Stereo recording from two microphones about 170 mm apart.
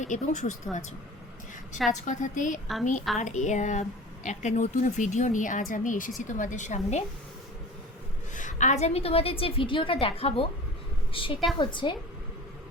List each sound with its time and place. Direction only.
0.0 s speech: 45° left (ahead or behind)
1.9 s speech: 45° left (ahead or behind)
8.4 s a woman's voice: 45° left (ahead or behind); by 11.9 s 30° left (ahead or behind)